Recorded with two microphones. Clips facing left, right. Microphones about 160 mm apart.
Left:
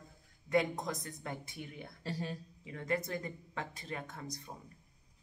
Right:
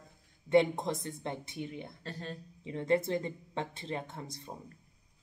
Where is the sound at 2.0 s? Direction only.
10° left (ahead or behind).